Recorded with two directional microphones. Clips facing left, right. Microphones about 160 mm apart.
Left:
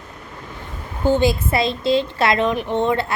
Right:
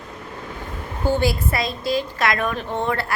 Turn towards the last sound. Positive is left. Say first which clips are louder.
# left 5 dB
turn(degrees=20)  # may be behind; listen again after turning